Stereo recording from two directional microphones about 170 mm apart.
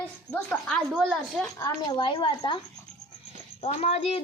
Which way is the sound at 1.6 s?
25° left (ahead or behind).